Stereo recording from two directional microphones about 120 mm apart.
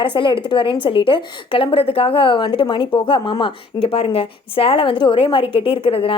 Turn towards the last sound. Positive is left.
turn(degrees=50)  # may be behind; listen again after turning